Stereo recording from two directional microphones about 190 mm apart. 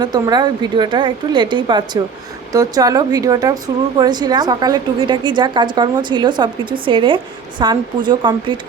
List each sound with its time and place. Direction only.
0.0 s speech: 20° right (ahead or behind)